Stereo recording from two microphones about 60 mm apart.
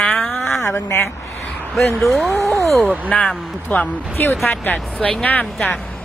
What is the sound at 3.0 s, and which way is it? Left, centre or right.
Speech, left.